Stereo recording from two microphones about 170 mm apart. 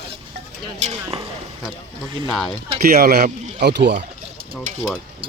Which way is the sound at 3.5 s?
80° right.